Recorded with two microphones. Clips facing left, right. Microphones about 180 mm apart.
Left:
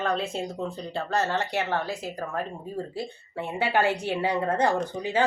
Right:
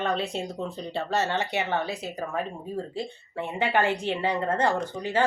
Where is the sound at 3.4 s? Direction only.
10° left (ahead or behind).